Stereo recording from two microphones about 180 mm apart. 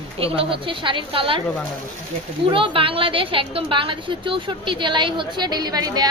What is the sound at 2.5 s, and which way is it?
A woman's voice, 30° right (ahead or behind).